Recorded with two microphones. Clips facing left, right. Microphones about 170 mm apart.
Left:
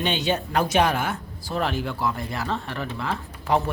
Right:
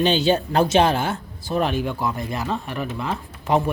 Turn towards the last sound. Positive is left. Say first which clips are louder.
# right 2 dB
turn(degrees=-20)  # may be behind; listen again after turning